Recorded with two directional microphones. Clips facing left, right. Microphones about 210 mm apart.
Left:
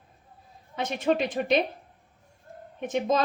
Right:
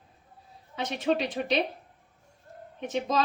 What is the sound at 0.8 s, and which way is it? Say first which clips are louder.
Speech: left 2 dB; 50° left (ahead or behind).